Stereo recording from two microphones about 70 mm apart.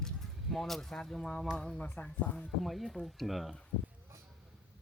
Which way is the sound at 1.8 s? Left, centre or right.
Centre.